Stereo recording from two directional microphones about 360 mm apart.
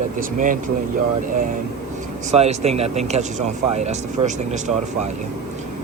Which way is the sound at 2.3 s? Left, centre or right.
Centre.